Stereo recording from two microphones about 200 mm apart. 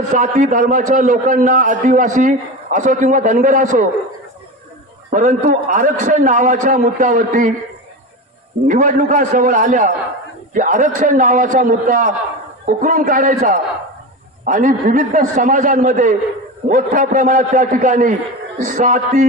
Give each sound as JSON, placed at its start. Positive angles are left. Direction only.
{"t": 0.1, "sound": "a man's voice", "side_deg": -40}
{"t": 5.1, "sound": "a man's voice", "side_deg": -40}
{"t": 8.6, "sound": "a man's voice", "side_deg": -40}